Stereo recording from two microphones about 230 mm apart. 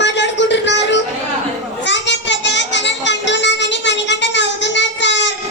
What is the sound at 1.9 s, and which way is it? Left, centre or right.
Child singing, left.